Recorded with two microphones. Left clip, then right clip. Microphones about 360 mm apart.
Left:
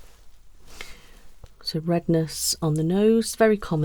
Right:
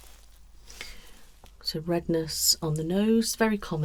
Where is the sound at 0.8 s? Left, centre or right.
Left.